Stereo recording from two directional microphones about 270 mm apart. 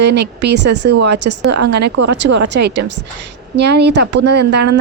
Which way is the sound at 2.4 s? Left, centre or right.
Right.